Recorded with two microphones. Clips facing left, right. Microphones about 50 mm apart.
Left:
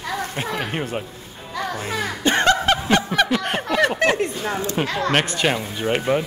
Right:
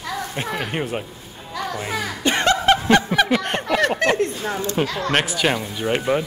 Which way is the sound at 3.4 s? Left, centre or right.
Centre.